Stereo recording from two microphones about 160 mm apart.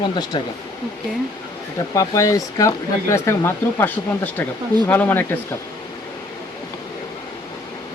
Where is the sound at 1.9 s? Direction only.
20° left (ahead or behind).